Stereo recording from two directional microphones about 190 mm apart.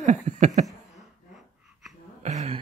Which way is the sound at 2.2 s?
35° right (ahead or behind).